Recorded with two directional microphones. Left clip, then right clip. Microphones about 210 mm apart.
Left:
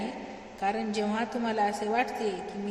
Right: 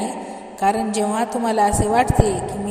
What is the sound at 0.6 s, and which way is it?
A woman's voice, 35° right (ahead or behind).